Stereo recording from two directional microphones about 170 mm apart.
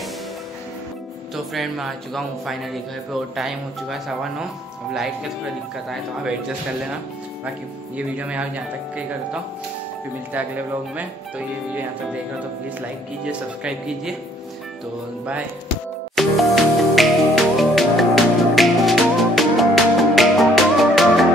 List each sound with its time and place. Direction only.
1.3 s speech: centre (ahead or behind)
8.2 s speech: 5° right (ahead or behind)
10.3 s speech: 10° right (ahead or behind)
13.2 s speech: 5° right (ahead or behind)
16.2 s music: centre (ahead or behind)